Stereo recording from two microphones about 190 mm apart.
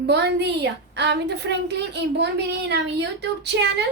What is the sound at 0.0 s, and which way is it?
A woman's voice, 60° right (ahead or behind).